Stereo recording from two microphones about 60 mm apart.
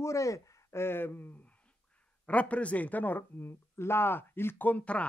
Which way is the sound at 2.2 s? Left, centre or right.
Left.